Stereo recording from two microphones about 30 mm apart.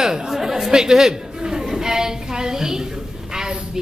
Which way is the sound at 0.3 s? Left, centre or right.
Centre.